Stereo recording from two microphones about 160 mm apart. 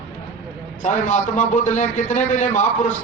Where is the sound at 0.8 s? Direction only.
50° left (ahead or behind).